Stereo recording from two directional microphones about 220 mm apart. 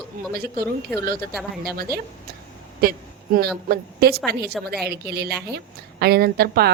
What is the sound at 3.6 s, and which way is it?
A woman's voice, 45° right (ahead or behind).